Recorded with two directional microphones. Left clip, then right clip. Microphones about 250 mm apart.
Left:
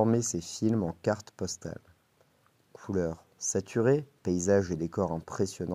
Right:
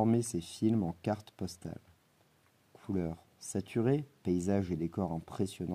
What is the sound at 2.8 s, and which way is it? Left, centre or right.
Speech, left.